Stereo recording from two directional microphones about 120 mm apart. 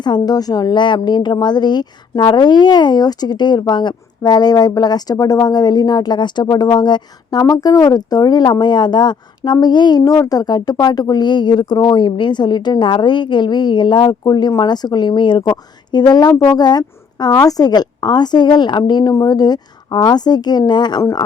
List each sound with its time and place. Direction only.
0.0 s a woman's voice: 35° left (ahead or behind)